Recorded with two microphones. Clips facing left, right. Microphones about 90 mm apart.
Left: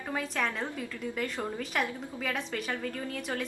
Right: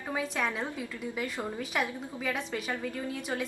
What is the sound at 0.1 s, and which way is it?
A woman's voice, 5° right (ahead or behind).